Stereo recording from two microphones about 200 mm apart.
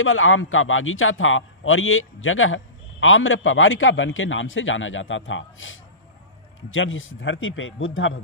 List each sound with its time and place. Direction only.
0.0 s a man's voice: 85° left